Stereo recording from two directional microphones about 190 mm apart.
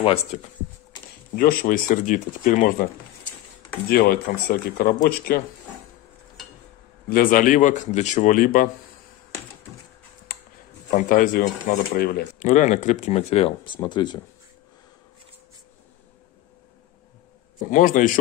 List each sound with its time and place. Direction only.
0.0 s speech: 35° left (ahead or behind)
1.3 s speech: 50° left (ahead or behind)
3.9 s speech: 50° left (ahead or behind)
7.1 s speech: 45° left (ahead or behind)
10.3 s a sound: 55° left (ahead or behind)
10.9 s speech: 45° left (ahead or behind); by 14.2 s 25° left (ahead or behind)
17.6 s speech: 45° left (ahead or behind)